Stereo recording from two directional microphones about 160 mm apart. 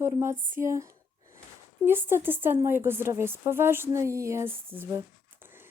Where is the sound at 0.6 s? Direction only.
15° right (ahead or behind).